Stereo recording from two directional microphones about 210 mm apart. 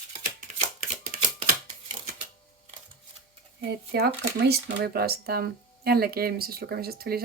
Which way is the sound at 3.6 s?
50° right (ahead or behind).